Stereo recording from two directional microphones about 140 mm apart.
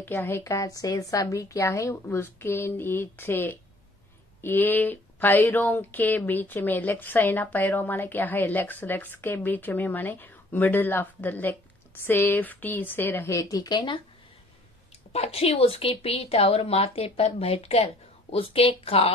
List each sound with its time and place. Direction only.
0.0 s speech: 15° left (ahead or behind); by 14.0 s 35° left (ahead or behind)
15.1 s a woman's voice: 45° left (ahead or behind)